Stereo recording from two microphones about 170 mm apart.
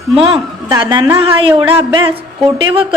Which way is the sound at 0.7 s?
25° right (ahead or behind).